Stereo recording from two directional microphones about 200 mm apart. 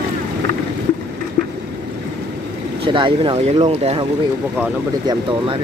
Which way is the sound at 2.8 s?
25° right (ahead or behind).